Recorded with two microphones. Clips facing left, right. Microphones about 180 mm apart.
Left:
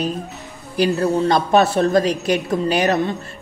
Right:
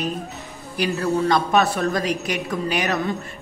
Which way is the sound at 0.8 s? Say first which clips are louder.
Left 4 dB; 35° left (ahead or behind).